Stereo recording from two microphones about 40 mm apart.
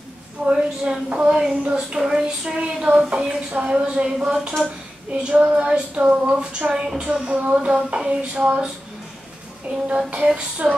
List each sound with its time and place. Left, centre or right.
0.5 s a woman's voice: right
2.0 s a woman's voice: centre
9.8 s a woman's voice: right